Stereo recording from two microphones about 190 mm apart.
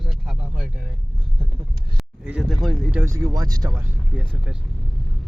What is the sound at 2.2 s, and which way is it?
Speech, 5° right (ahead or behind).